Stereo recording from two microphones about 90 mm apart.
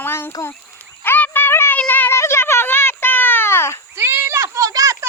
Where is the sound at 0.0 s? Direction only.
25° left (ahead or behind).